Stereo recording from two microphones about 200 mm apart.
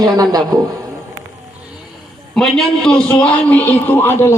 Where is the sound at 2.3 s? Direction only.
5° left (ahead or behind).